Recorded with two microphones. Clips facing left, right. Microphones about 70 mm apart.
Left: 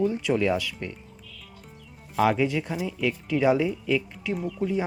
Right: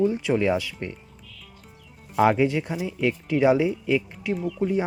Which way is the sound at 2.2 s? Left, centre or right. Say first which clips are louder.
Right 3 dB; right.